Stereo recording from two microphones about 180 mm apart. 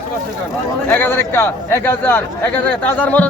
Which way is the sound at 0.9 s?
10° left (ahead or behind).